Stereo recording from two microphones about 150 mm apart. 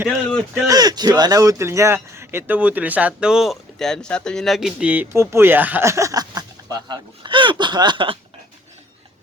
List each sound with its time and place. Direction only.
0.1 s speech: 5° left (ahead or behind)
0.7 s speech: 25° right (ahead or behind)